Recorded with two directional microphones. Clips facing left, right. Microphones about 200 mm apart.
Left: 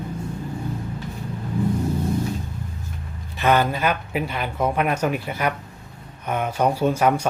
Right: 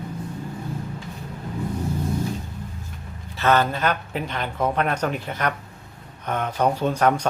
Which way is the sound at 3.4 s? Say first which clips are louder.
Left 1 dB; 10° left (ahead or behind).